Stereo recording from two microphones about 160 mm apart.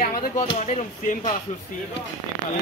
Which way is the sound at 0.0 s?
65° left (ahead or behind).